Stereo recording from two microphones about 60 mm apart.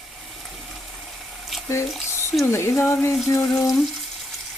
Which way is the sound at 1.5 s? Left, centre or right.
Centre.